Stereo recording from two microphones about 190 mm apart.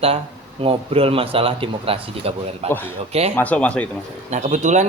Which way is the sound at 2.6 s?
10° left (ahead or behind).